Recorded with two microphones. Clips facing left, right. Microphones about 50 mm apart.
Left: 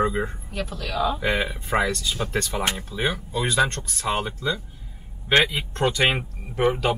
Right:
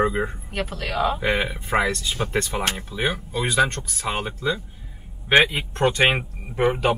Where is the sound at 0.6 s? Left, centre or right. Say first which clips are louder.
Right 2 dB; right.